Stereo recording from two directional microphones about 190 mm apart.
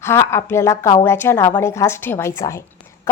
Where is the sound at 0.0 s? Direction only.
15° left (ahead or behind).